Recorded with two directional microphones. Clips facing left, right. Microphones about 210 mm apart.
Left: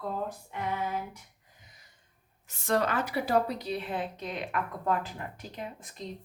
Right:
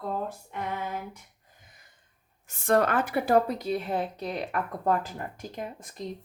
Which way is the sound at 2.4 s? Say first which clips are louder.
Right 4 dB; 50° right (ahead or behind).